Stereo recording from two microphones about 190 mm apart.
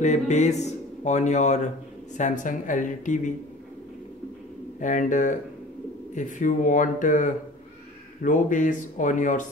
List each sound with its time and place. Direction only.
0.0 s speech: 40° left (ahead or behind)
4.7 s speech: 45° left (ahead or behind)